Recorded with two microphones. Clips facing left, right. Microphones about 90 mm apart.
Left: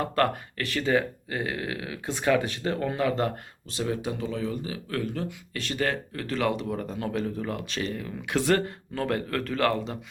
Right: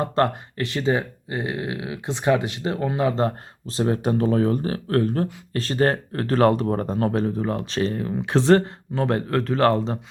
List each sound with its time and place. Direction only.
0.0 s speech: 25° right (ahead or behind)